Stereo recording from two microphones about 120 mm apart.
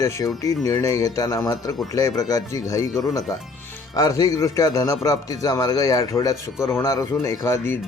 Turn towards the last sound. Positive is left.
turn(degrees=20)  # may be behind; listen again after turning